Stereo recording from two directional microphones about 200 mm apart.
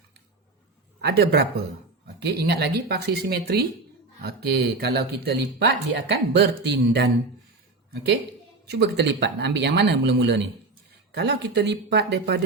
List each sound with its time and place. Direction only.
1.0 s speech: 50° right (ahead or behind)
8.6 s speech: 55° right (ahead or behind)